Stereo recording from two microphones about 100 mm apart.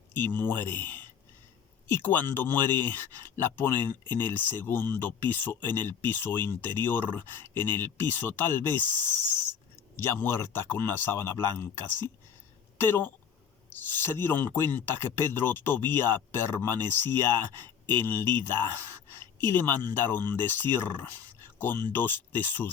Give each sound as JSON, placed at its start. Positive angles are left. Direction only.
{"t": 0.1, "sound": "speech", "side_deg": 20}
{"t": 9.9, "sound": "speech", "side_deg": 25}